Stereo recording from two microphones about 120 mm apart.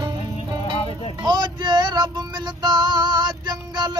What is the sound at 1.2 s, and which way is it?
Music, 35° right (ahead or behind).